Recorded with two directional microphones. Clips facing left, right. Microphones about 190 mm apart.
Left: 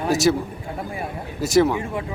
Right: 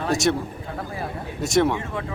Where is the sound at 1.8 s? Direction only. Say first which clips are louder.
Left 2 dB; 15° left (ahead or behind).